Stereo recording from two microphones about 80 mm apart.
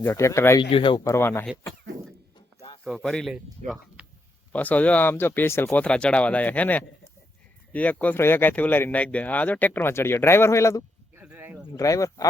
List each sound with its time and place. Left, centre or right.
0.0 s speech: left
0.6 s speech: left
1.0 s speech: left
2.8 s speech: centre
3.2 s speech: centre
4.0 s a sound: centre
4.5 s speech: centre
5.7 s speech: centre; by 10.8 s left
11.3 s a sound: right
11.8 s speech: left